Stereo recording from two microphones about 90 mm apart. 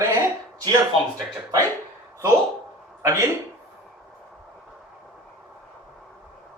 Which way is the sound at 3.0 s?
30° right (ahead or behind).